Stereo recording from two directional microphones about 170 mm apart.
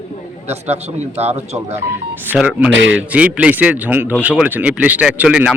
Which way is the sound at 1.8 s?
15° right (ahead or behind).